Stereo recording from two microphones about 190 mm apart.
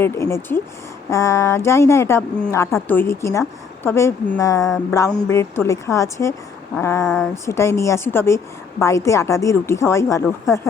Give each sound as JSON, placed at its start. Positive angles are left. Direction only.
{"t": 0.0, "sound": "a woman's voice", "side_deg": 15}